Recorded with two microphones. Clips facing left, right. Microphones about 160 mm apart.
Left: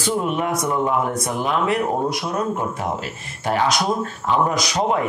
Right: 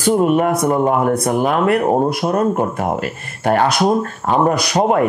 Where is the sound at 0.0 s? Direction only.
50° right (ahead or behind).